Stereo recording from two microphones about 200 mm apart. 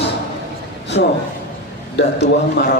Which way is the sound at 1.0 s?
60° left (ahead or behind).